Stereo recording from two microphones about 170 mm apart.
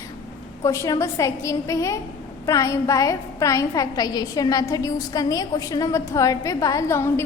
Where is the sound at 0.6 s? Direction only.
20° left (ahead or behind).